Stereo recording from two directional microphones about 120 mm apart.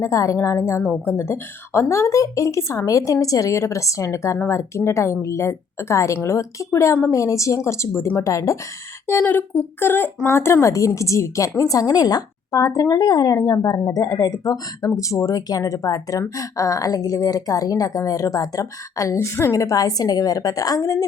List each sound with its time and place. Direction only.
0.0 s a woman's voice: 25° left (ahead or behind)